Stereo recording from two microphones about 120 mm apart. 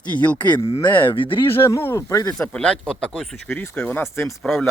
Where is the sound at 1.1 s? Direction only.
45° left (ahead or behind).